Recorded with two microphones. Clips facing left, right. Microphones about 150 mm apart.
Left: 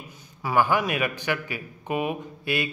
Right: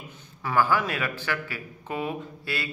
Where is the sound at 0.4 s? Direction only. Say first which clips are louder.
Left 1 dB; 15° left (ahead or behind).